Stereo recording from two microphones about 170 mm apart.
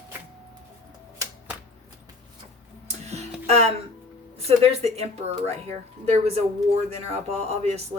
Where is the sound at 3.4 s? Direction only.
40° right (ahead or behind).